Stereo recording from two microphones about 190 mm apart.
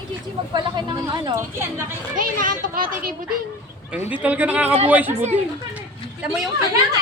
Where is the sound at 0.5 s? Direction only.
25° right (ahead or behind).